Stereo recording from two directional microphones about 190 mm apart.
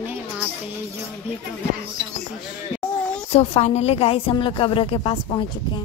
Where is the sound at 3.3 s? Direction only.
35° left (ahead or behind).